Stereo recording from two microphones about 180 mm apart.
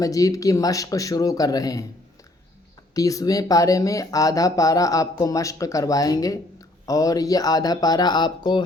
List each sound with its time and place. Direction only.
0.0 s speech: 20° left (ahead or behind)
2.9 s speech: 20° left (ahead or behind)